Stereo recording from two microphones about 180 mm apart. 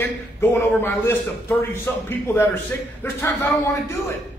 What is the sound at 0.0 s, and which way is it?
A man's voice, 10° left (ahead or behind).